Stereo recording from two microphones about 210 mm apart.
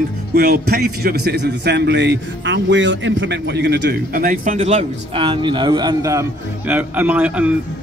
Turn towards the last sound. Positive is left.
turn(degrees=-5)  # may be behind; listen again after turning